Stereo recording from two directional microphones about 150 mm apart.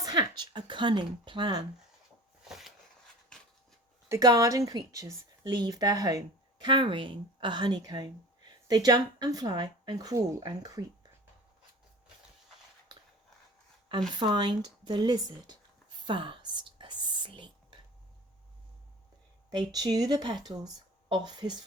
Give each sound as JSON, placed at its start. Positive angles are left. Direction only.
{"t": 0.0, "sound": "speech", "side_deg": -25}
{"t": 2.4, "sound": "a sound", "side_deg": 0}
{"t": 4.1, "sound": "a woman's voice", "side_deg": -25}
{"t": 14.1, "sound": "a woman's voice", "side_deg": -30}
{"t": 16.0, "sound": "whispering", "side_deg": -35}
{"t": 19.5, "sound": "a woman's voice", "side_deg": -25}